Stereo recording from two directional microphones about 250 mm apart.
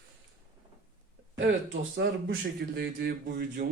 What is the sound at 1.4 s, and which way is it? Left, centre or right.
Speech, right.